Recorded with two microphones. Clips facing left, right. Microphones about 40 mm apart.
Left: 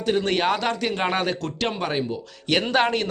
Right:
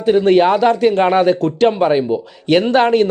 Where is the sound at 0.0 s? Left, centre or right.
Centre.